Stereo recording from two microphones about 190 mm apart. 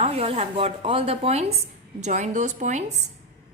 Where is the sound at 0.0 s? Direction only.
30° right (ahead or behind).